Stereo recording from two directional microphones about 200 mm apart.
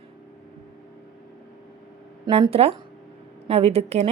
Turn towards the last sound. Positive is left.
turn(degrees=-30)  # may be behind; listen again after turning